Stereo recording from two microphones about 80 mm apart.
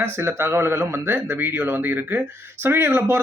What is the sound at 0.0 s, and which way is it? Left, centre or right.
Speech, right.